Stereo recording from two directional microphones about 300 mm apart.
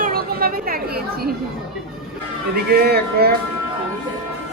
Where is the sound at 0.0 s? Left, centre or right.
Right.